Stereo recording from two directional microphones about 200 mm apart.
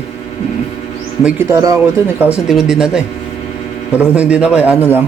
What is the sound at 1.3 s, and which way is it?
Speech, 10° right (ahead or behind).